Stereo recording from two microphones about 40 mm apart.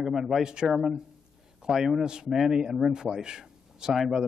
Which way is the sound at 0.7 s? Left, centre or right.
Centre.